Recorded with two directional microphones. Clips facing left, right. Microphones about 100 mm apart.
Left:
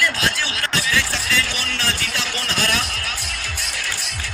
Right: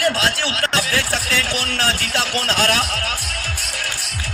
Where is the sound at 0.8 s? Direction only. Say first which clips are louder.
Right 2 dB; 50° right (ahead or behind).